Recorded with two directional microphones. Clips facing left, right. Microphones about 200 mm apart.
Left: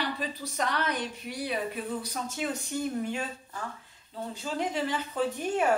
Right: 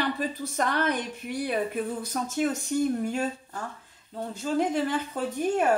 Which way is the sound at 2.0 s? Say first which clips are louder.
Right 6 dB; 50° right (ahead or behind).